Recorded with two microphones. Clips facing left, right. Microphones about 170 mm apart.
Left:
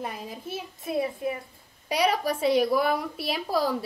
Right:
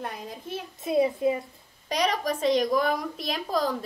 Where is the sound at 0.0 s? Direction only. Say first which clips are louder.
Left 1 dB; 5° left (ahead or behind).